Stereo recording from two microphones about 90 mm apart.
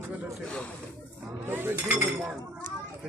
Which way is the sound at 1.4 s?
25° right (ahead or behind).